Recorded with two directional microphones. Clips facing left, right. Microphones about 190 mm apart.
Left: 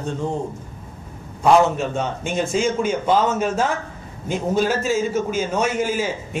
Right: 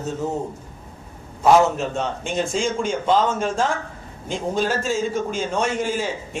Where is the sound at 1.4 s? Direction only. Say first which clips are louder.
Even; centre (ahead or behind).